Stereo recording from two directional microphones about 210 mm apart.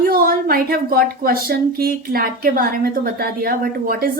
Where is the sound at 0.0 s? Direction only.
45° right (ahead or behind).